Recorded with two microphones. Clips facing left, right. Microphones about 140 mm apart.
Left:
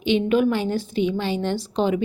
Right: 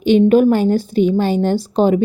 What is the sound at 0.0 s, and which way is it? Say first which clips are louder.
A woman's voice: right 8 dB; 40° right (ahead or behind).